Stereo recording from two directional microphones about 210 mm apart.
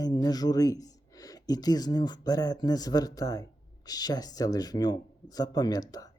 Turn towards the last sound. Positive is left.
turn(degrees=20)  # may be behind; listen again after turning